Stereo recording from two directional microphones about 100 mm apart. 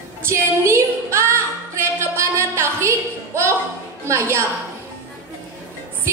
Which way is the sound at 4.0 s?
25° right (ahead or behind).